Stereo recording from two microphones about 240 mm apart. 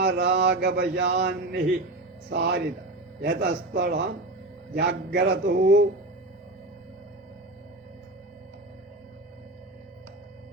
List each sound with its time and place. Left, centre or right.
0.0 s a man's voice: right